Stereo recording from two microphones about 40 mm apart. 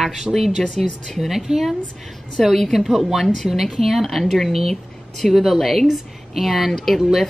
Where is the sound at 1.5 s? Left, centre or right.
Centre.